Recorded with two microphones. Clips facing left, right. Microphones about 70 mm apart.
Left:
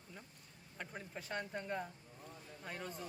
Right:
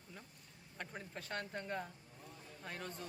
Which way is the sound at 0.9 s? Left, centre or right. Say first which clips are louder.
Left 1 dB; centre.